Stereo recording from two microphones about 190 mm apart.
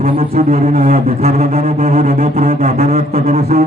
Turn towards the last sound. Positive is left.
turn(degrees=-40)  # may be behind; listen again after turning